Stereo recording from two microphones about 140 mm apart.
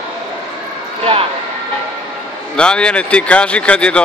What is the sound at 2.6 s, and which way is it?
Speech, 5° left (ahead or behind).